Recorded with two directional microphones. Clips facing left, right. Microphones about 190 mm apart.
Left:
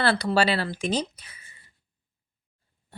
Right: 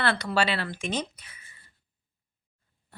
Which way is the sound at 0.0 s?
35° left (ahead or behind).